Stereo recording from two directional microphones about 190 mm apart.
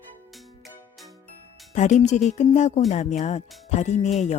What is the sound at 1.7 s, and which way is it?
Speech, 40° left (ahead or behind).